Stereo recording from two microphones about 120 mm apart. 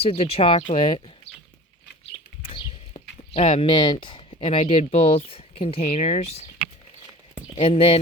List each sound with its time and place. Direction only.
0.0 s speech: 55° left (ahead or behind)
2.4 s a sound: 50° left (ahead or behind)
4.6 s speech: 65° left (ahead or behind)
7.5 s speech: 55° left (ahead or behind)